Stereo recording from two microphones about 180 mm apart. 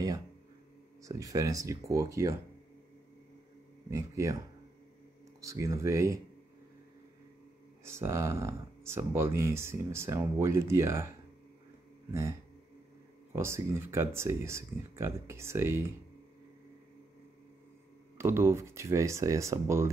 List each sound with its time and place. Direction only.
1.0 s speech: 20° right (ahead or behind)
3.9 s speech: 15° right (ahead or behind)
5.4 s speech: 15° right (ahead or behind)
7.8 s speech: 15° right (ahead or behind)
18.1 s speech: 15° right (ahead or behind)